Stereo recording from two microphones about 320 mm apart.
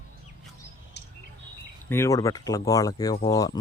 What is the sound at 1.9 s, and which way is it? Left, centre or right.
Speech, centre.